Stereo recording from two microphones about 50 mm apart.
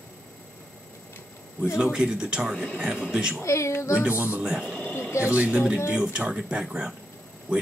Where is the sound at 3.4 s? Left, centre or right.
Left.